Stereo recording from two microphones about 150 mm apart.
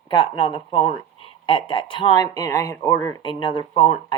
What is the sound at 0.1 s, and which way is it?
Speech, 35° left (ahead or behind).